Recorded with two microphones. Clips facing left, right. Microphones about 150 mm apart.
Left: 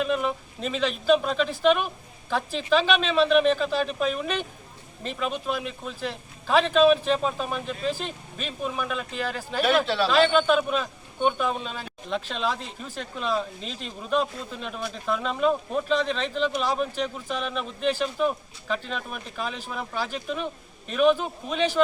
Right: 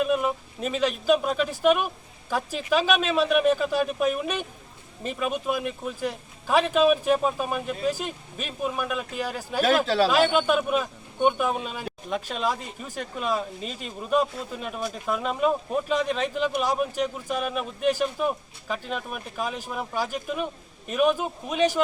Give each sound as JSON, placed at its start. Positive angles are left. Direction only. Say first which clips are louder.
{"t": 0.0, "sound": "a man's voice", "louder": "right 2 dB", "side_deg": -5}
{"t": 9.6, "sound": "speech", "louder": "right 2 dB", "side_deg": -40}
{"t": 10.1, "sound": "a man's voice", "louder": "left 1 dB", "side_deg": -10}